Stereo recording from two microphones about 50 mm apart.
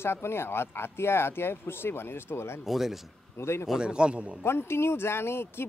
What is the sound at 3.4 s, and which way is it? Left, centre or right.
Speech, left.